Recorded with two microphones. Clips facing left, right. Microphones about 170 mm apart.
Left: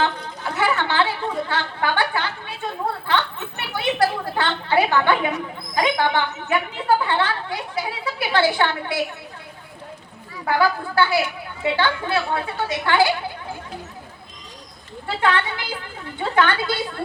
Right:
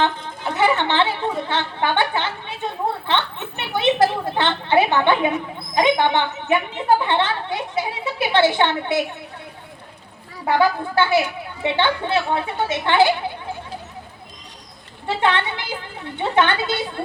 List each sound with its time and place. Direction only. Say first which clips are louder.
0.0 s chatter: right 2 dB; 20° right (ahead or behind)
3.1 s a sound: even; 20° right (ahead or behind)
10.4 s a woman's voice: right 2 dB; 20° right (ahead or behind)
15.0 s a woman's voice: right 1 dB; 20° right (ahead or behind)